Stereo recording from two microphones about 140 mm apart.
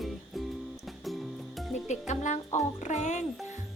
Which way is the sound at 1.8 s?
55° left (ahead or behind).